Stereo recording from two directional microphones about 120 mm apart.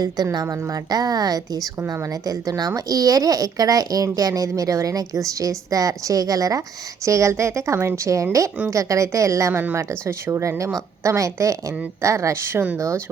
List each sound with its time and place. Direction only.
0.0 s a woman's voice: 35° right (ahead or behind)